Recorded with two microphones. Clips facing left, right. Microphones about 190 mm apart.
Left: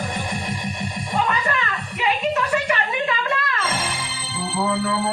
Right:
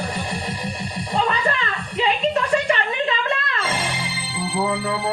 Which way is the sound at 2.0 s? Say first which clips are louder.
Right 1 dB; 25° right (ahead or behind).